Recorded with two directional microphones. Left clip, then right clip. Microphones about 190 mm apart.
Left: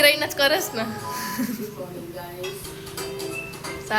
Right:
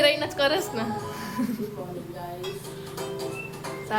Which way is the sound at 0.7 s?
10° right (ahead or behind).